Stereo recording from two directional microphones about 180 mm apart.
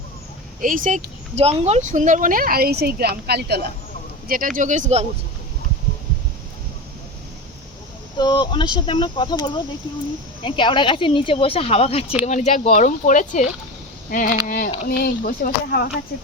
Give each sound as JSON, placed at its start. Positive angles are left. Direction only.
{"t": 0.6, "sound": "speech", "side_deg": -50}
{"t": 4.3, "sound": "speech", "side_deg": -50}
{"t": 8.2, "sound": "speech", "side_deg": 25}